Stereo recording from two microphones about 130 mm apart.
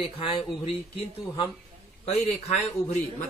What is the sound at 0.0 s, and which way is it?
Speech, 40° left (ahead or behind).